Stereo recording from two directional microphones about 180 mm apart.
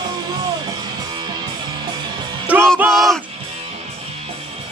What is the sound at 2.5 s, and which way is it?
Music, 10° right (ahead or behind).